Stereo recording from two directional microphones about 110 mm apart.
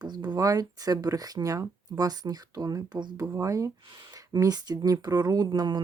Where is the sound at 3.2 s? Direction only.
30° right (ahead or behind).